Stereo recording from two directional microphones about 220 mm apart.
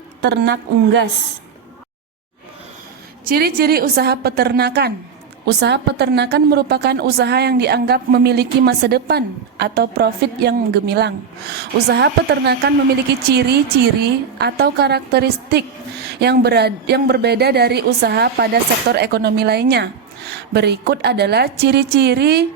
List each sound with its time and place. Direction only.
0.2 s a woman's voice: 50° right (ahead or behind)
3.2 s a woman's voice: 45° right (ahead or behind)